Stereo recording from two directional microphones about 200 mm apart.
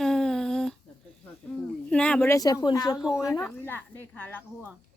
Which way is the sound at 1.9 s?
5° left (ahead or behind).